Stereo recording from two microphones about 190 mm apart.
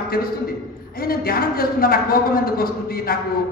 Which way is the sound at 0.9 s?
50° left (ahead or behind).